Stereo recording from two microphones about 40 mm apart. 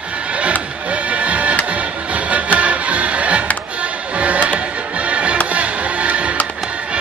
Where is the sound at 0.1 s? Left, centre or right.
Right.